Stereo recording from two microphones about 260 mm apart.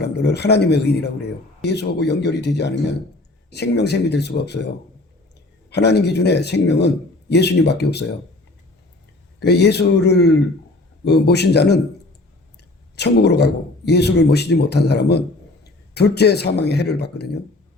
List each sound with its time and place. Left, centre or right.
0.0 s speech: left
5.7 s speech: left
9.4 s speech: left
13.0 s speech: left